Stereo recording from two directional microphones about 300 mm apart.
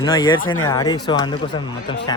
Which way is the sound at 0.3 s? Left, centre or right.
Left.